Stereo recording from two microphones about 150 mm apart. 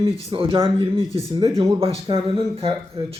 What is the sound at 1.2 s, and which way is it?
Speech, 25° right (ahead or behind).